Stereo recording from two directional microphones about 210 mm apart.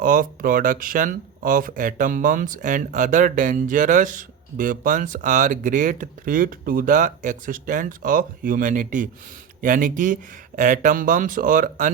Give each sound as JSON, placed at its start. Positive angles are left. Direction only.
{"t": 0.0, "sound": "speech", "side_deg": -40}